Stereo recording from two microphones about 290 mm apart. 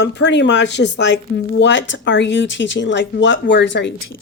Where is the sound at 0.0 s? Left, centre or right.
Left.